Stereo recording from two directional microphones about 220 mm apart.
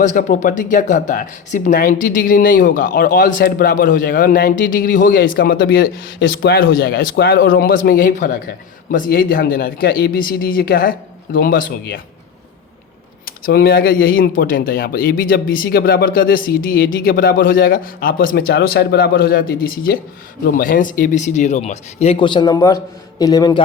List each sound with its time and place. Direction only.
0.0 s speech: 35° left (ahead or behind)
13.2 s speech: 45° left (ahead or behind); by 23.6 s 15° left (ahead or behind)